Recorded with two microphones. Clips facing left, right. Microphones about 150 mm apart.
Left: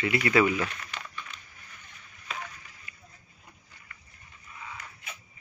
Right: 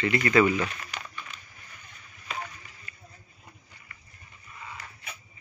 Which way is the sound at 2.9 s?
15° left (ahead or behind).